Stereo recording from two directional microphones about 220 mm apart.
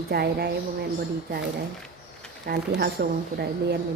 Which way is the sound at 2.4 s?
45° right (ahead or behind).